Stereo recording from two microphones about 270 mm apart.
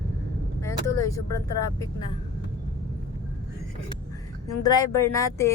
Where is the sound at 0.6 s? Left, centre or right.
Centre.